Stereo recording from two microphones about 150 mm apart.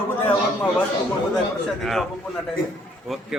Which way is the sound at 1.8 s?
Centre (ahead or behind).